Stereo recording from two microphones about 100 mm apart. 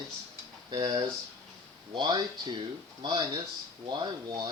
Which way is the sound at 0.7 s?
40° right (ahead or behind).